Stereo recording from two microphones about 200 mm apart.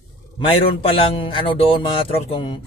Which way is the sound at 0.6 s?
25° left (ahead or behind).